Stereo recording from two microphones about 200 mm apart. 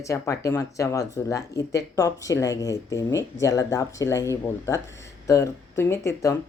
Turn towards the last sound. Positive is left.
turn(degrees=15)  # may be behind; listen again after turning